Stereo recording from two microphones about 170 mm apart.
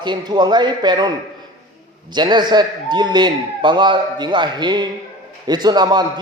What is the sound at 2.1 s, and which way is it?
A man's voice, 25° right (ahead or behind).